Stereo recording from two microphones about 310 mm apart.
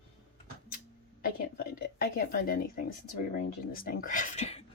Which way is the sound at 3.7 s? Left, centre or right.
Left.